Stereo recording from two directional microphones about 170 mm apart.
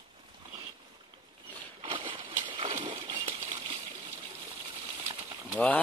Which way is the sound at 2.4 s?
30° right (ahead or behind).